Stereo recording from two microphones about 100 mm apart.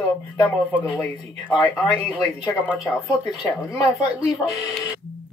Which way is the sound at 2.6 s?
15° right (ahead or behind).